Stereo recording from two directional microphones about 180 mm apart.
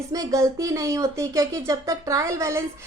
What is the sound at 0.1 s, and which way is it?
A woman's voice, 20° right (ahead or behind).